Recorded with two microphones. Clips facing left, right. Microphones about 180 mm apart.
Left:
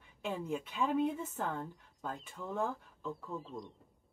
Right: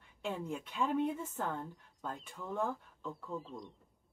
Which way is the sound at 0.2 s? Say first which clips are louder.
Left 2 dB; centre (ahead or behind).